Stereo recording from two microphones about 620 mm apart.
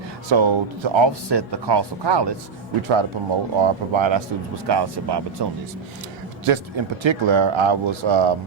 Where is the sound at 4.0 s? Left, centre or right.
Right.